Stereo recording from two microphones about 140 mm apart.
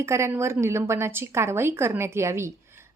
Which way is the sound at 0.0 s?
20° right (ahead or behind).